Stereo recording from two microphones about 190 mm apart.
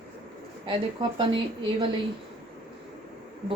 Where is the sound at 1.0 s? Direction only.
25° right (ahead or behind).